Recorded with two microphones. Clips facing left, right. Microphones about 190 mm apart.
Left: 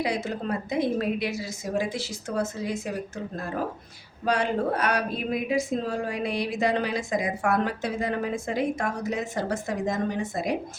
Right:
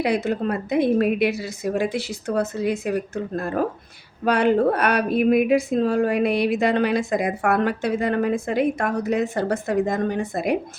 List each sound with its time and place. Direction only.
0.0 s speech: 60° right (ahead or behind)
4.3 s speech: 60° right (ahead or behind)